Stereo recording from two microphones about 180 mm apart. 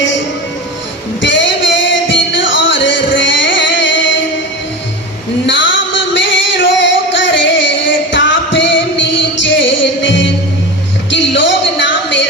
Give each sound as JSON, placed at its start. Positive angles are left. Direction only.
{"t": 1.2, "sound": "music", "side_deg": 90}
{"t": 5.5, "sound": "music", "side_deg": 90}